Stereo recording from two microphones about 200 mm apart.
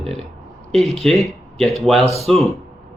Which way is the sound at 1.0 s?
Centre (ahead or behind).